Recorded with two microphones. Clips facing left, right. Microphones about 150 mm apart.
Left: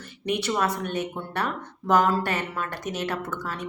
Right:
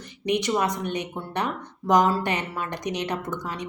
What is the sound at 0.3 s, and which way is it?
A woman's voice, 15° right (ahead or behind).